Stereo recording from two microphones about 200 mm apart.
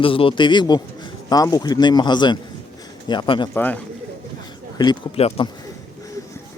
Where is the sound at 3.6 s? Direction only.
10° left (ahead or behind).